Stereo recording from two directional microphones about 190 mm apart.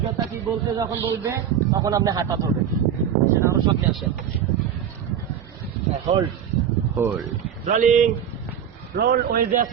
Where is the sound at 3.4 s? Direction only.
15° right (ahead or behind).